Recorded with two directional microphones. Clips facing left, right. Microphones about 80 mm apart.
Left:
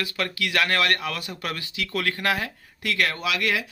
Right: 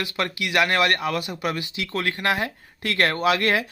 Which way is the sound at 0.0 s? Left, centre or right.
Right.